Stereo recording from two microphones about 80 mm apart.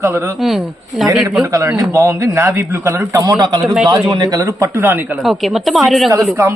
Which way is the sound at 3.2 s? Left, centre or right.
Right.